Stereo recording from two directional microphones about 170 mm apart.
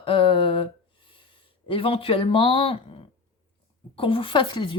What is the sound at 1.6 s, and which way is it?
Speech, 30° left (ahead or behind).